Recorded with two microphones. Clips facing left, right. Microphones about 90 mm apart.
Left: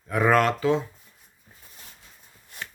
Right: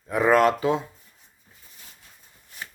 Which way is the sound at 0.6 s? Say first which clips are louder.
Left 1 dB; 15° right (ahead or behind).